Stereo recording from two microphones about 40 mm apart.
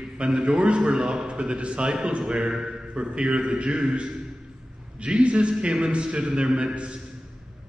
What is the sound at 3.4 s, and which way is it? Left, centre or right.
Speech, right.